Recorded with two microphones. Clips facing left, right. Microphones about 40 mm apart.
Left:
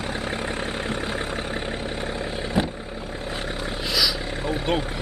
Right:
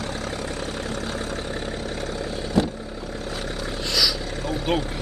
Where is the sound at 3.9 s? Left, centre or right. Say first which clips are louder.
Even; centre.